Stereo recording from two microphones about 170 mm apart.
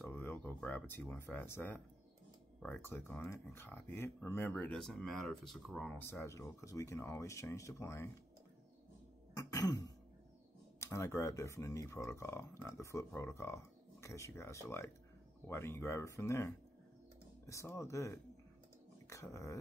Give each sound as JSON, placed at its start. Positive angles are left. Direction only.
{"t": 0.0, "sound": "speech", "side_deg": 10}
{"t": 5.9, "sound": "speech", "side_deg": 15}
{"t": 9.3, "sound": "throat clearing", "side_deg": 20}
{"t": 10.8, "sound": "speech", "side_deg": 15}